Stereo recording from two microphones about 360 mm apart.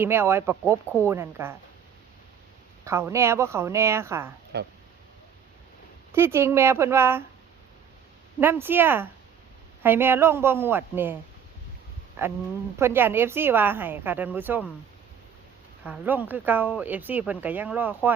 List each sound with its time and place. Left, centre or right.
0.0 s speech: centre
2.8 s speech: centre
4.5 s speech: right
6.1 s speech: centre
8.4 s speech: centre
15.8 s speech: centre